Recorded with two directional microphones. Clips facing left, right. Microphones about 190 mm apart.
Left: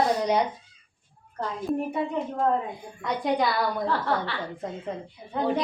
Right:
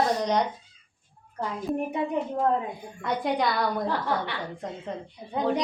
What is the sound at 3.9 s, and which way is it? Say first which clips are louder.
Speech: left 1 dB; 15° right (ahead or behind).